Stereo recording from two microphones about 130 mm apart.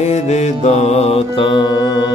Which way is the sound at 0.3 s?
60° left (ahead or behind).